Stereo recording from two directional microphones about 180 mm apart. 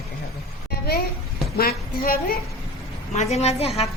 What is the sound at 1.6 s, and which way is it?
Speech, 55° left (ahead or behind).